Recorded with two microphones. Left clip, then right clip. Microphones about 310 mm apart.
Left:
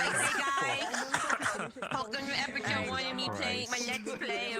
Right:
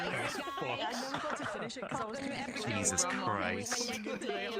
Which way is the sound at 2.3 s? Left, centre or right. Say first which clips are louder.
Left 5 dB; left.